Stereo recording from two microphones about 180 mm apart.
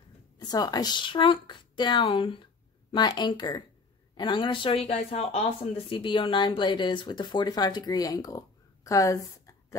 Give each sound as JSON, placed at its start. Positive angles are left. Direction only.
{"t": 0.4, "sound": "speech", "side_deg": 20}